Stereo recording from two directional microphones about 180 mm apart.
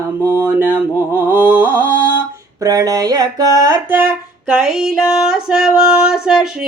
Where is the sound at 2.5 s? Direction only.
20° right (ahead or behind).